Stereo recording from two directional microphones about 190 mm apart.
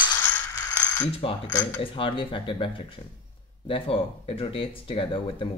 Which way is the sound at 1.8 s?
25° left (ahead or behind).